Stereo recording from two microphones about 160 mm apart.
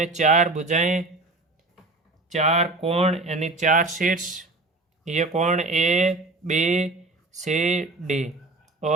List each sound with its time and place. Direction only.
0.0 s speech: 45° right (ahead or behind)
2.3 s speech: 45° right (ahead or behind)
5.0 s speech: 45° right (ahead or behind)